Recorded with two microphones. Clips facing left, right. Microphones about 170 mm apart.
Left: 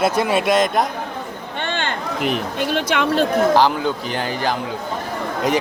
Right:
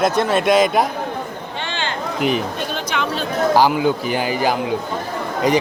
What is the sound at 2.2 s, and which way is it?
Speech, centre (ahead or behind).